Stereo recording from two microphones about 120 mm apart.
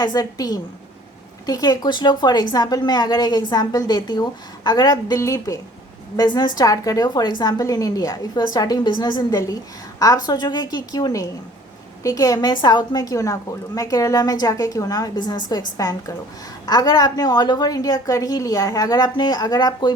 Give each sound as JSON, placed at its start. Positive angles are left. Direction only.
{"t": 0.0, "sound": "a woman's voice", "side_deg": 35}